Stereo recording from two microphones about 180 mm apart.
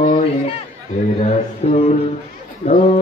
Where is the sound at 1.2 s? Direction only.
40° left (ahead or behind).